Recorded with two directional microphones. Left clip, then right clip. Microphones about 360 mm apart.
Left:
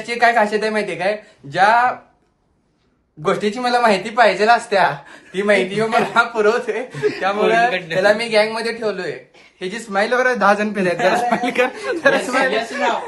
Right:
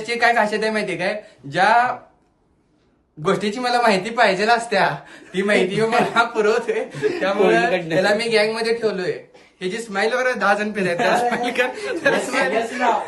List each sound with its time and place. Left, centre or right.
0.0 s speech: centre
3.2 s speech: centre
7.7 s speech: right
8.0 s a man's voice: centre